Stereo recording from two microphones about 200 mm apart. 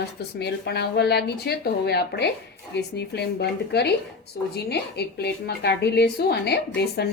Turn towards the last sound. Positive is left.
turn(degrees=55)  # may be behind; listen again after turning